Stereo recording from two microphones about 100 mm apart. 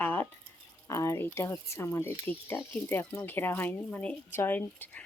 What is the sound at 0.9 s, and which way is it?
Speech, 30° left (ahead or behind).